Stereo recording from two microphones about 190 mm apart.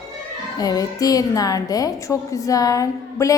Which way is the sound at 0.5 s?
20° left (ahead or behind).